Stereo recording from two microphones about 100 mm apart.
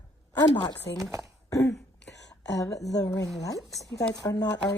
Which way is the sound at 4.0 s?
40° left (ahead or behind).